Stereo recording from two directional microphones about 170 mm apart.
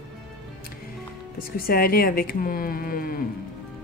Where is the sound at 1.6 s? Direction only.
60° left (ahead or behind).